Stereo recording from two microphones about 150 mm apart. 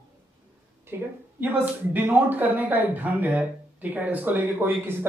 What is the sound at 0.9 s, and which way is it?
Speech, 15° right (ahead or behind).